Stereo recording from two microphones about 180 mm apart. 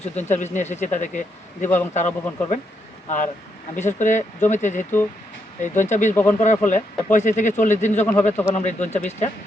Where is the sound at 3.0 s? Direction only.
45° left (ahead or behind).